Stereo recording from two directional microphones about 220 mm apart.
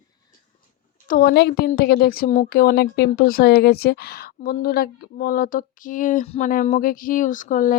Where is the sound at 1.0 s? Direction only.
45° left (ahead or behind).